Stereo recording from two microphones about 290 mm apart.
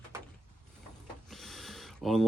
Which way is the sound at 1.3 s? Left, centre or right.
Centre.